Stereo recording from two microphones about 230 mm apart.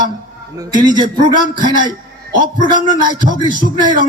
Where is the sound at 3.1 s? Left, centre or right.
Centre.